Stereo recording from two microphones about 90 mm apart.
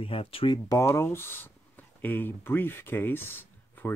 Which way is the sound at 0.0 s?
90° left.